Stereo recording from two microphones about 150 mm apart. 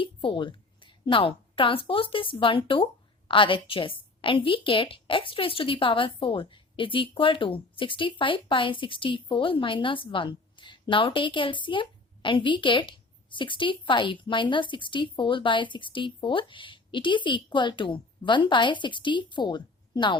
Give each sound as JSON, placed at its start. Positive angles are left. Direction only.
{"t": 0.0, "sound": "a woman's voice", "side_deg": 35}